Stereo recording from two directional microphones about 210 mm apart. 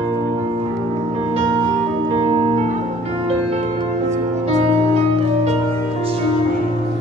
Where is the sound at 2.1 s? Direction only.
25° right (ahead or behind).